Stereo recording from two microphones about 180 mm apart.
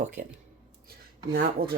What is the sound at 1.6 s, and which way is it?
Speech, 55° right (ahead or behind).